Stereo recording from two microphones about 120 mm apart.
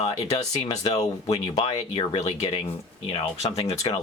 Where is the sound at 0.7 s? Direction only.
30° left (ahead or behind).